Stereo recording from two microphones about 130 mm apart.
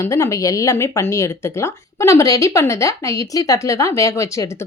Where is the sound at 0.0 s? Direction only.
25° left (ahead or behind).